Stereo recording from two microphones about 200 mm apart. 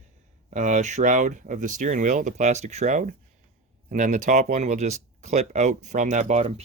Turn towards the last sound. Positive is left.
turn(degrees=-35)  # may be behind; listen again after turning